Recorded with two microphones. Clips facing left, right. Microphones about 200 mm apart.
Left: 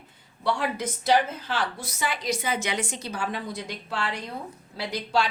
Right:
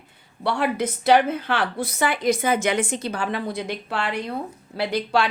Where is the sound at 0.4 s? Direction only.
60° right (ahead or behind).